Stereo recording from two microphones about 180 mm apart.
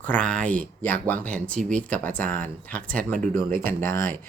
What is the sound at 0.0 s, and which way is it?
Speech, 5° left (ahead or behind).